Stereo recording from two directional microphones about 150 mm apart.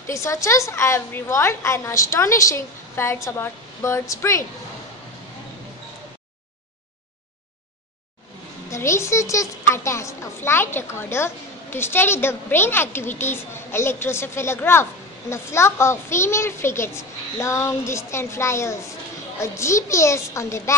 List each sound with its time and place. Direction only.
0.0 s a woman's voice: 20° left (ahead or behind)
8.6 s a woman's voice: 20° left (ahead or behind)